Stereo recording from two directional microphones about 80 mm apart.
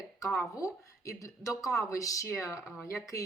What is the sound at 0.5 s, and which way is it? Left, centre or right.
A woman's voice, left.